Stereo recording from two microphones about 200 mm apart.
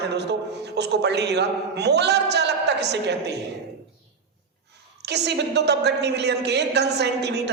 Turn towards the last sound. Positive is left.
turn(degrees=-55)  # may be behind; listen again after turning